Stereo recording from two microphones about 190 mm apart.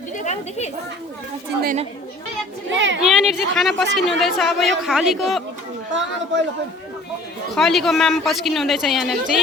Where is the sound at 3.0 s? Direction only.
Centre (ahead or behind).